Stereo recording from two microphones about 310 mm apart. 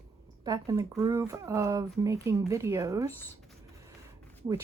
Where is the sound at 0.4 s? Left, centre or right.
Centre.